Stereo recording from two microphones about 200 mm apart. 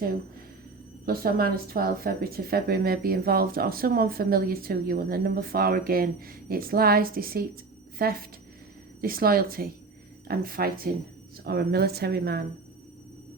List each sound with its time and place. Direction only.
1.0 s speech: 50° right (ahead or behind)